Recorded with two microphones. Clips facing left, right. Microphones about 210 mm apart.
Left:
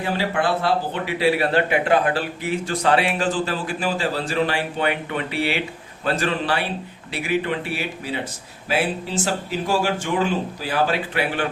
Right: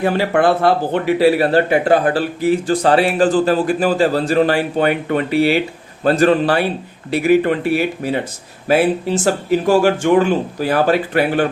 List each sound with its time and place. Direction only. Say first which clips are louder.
0.0 s speech: right 8 dB; 50° right (ahead or behind)